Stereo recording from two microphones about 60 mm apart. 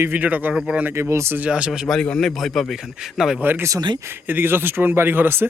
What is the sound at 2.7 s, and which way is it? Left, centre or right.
Speech, centre.